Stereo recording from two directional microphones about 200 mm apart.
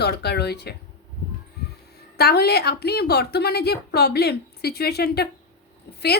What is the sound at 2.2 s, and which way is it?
A woman's voice, 50° left (ahead or behind).